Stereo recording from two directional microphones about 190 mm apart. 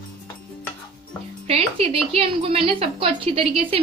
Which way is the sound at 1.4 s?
30° right (ahead or behind).